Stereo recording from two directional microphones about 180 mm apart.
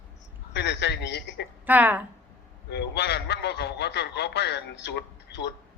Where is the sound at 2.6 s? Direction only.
70° left (ahead or behind).